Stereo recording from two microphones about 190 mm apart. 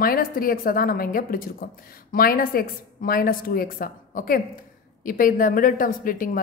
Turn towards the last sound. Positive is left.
turn(degrees=45)  # may be behind; listen again after turning